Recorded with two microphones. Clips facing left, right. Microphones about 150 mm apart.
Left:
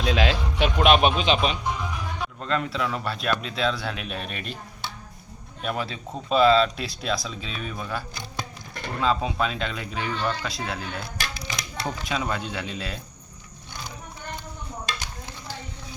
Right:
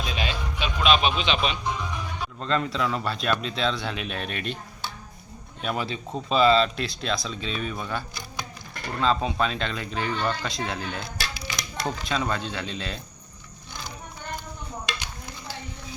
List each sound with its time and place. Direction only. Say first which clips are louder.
0.0 s music: left 7 dB; 90° left
0.8 s a sound: left 3 dB; 55° left (ahead or behind)
1.2 s speech: left 3 dB; 40° left (ahead or behind)
2.4 s speech: right 1 dB; 5° left (ahead or behind)
5.6 s speech: even; centre (ahead or behind)